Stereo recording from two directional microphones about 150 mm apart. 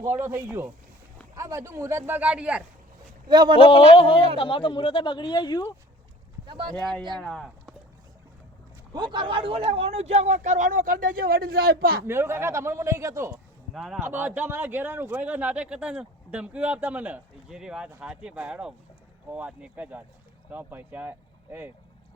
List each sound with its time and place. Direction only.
0.2 s speech: 15° right (ahead or behind)
3.2 s speech: 30° right (ahead or behind)
4.4 s speech: 35° left (ahead or behind)
6.4 s speech: 30° right (ahead or behind)
6.7 s speech: 5° left (ahead or behind)
8.9 s speech: 30° right (ahead or behind); by 12.0 s 80° right
12.0 s speech: 15° right (ahead or behind)
13.7 s speech: centre (ahead or behind)
14.0 s speech: 10° right (ahead or behind)